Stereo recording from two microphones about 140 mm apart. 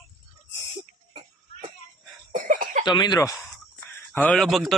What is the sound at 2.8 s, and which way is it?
Speech, 30° left (ahead or behind).